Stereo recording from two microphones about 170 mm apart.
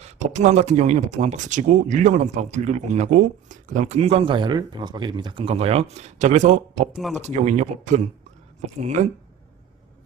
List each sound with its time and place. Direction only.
0.0 s speech: 40° right (ahead or behind)
6.9 s speech: centre (ahead or behind)
7.2 s speech: 45° right (ahead or behind)